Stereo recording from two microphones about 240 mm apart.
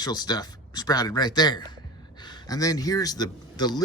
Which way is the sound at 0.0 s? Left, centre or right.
Centre.